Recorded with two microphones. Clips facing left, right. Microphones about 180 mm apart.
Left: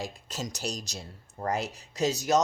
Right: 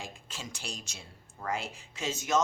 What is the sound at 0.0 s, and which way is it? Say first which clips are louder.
Speech: left 7 dB; 40° left (ahead or behind).